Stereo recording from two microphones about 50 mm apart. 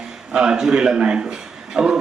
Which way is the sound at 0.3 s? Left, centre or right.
Centre.